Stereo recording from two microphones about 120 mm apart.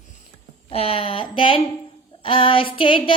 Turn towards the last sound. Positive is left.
turn(degrees=45)  # may be behind; listen again after turning